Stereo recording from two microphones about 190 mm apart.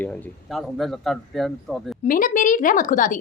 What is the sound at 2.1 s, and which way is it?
A woman's voice, 45° left (ahead or behind).